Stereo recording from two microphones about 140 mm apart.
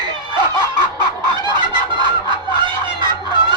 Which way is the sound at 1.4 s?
30° right (ahead or behind).